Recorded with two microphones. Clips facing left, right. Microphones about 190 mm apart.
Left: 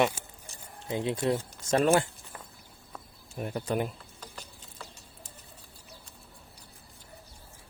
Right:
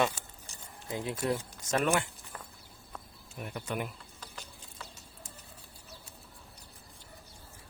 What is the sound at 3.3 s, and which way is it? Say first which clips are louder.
Speech: left 6 dB; 35° left (ahead or behind).